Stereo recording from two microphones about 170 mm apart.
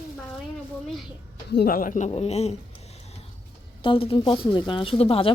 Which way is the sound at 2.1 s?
40° left (ahead or behind).